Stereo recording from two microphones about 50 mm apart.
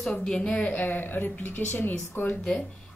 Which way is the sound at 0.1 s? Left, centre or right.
Centre.